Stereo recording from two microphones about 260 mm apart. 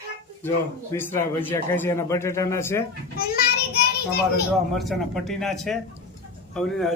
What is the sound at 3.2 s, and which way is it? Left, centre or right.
Speech, left.